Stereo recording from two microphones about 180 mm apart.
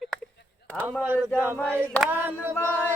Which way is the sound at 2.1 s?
10° right (ahead or behind).